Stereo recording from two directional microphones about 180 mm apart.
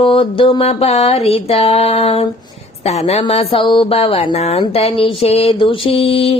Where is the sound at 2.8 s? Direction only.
40° left (ahead or behind).